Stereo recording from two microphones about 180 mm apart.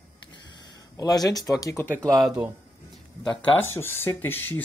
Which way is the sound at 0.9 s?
20° left (ahead or behind).